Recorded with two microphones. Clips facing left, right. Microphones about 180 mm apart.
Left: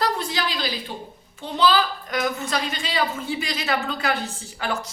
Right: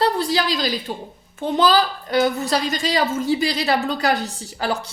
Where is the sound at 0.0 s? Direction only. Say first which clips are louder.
Right 5 dB; 35° right (ahead or behind).